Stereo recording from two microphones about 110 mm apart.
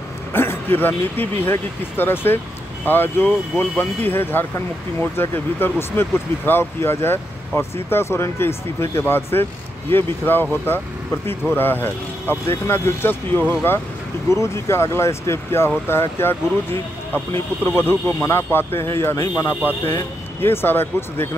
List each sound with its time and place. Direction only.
0.3 s speech: 20° left (ahead or behind)